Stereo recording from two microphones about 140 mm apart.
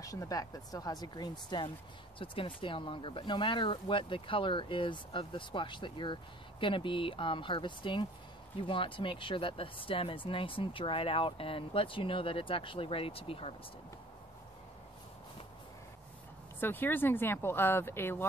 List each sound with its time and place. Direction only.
0.0 s speech: 25° left (ahead or behind); by 13.6 s 40° left (ahead or behind)
16.5 s speech: 15° left (ahead or behind)